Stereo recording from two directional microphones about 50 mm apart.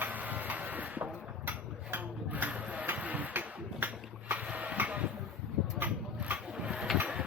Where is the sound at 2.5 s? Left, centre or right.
Right.